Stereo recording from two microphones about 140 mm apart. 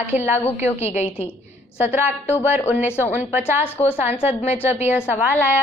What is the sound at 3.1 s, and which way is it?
Speech, 15° right (ahead or behind).